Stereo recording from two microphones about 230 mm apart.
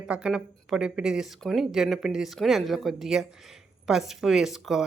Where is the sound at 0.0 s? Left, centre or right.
Centre.